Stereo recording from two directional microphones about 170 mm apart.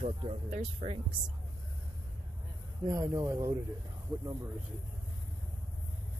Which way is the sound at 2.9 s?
20° right (ahead or behind).